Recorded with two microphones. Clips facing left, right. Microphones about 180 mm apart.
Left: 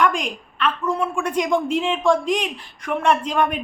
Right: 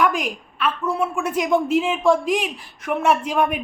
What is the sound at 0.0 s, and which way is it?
A woman's voice, 5° right (ahead or behind).